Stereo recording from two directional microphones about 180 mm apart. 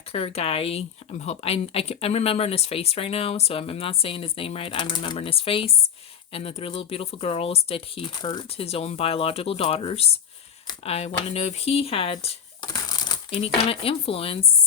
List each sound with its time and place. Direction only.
0.1 s speech: 35° left (ahead or behind)
12.7 s speech: 20° left (ahead or behind)